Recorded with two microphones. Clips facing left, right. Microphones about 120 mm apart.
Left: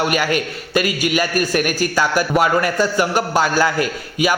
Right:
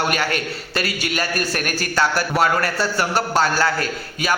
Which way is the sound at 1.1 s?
10° left (ahead or behind).